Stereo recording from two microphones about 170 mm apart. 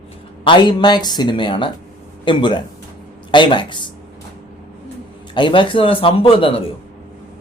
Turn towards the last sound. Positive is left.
turn(degrees=35)  # may be behind; listen again after turning